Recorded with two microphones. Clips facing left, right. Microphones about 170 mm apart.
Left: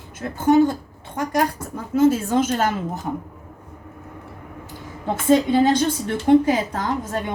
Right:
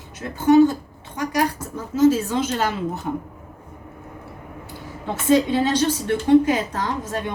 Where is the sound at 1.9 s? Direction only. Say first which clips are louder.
Even; 55° left (ahead or behind).